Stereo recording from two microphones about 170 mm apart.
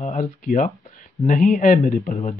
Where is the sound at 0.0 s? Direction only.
50° left (ahead or behind).